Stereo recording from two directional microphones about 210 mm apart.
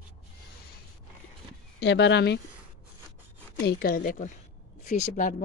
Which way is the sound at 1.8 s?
55° left (ahead or behind).